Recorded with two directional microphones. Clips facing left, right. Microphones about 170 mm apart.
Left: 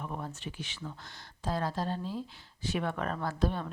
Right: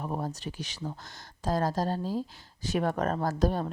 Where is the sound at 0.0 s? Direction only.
40° right (ahead or behind).